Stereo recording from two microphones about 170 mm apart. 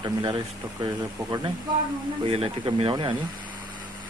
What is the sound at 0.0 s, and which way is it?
Speech, 30° right (ahead or behind).